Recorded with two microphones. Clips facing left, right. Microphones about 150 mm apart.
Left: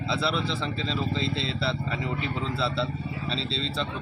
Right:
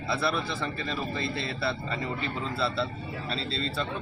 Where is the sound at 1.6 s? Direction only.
10° left (ahead or behind).